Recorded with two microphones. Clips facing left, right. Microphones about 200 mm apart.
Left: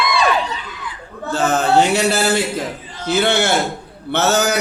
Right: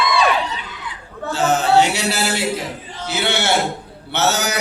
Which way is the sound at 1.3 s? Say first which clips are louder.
Even; 55° left (ahead or behind).